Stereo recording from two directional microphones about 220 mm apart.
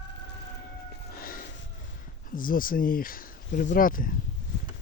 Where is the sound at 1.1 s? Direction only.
40° left (ahead or behind).